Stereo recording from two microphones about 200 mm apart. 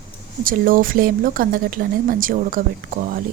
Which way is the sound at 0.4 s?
45° right (ahead or behind).